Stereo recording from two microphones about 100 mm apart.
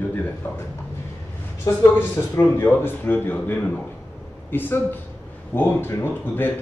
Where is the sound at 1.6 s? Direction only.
25° left (ahead or behind).